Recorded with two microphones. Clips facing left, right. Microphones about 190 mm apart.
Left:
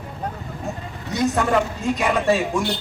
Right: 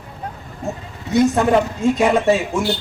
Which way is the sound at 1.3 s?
25° right (ahead or behind).